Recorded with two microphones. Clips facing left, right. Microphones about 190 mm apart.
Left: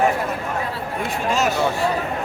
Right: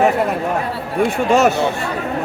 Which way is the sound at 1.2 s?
60° right (ahead or behind).